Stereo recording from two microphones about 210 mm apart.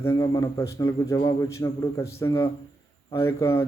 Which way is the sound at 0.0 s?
15° left (ahead or behind).